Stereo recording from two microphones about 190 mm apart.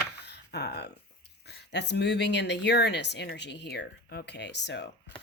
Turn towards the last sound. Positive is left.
turn(degrees=65)  # may be behind; listen again after turning